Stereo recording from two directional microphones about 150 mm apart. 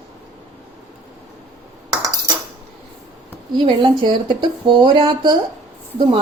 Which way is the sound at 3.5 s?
35° right (ahead or behind).